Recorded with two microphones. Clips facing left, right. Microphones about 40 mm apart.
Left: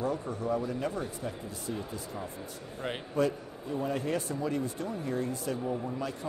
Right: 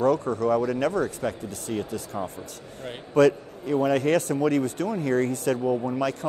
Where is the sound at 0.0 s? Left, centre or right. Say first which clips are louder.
Right 10 dB; right.